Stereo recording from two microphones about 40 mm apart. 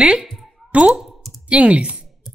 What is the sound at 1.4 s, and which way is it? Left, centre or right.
Speech, right.